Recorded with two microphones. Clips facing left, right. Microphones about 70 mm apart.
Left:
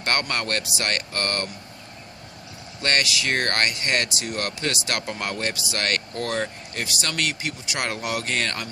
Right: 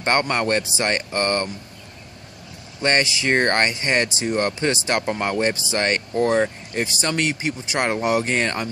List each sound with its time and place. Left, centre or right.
0.0 s speech: right
2.8 s speech: right